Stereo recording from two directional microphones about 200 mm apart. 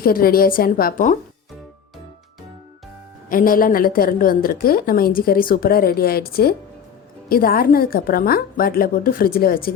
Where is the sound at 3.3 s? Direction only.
45° left (ahead or behind).